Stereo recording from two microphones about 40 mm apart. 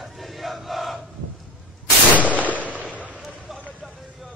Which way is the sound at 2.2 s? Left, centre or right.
Left.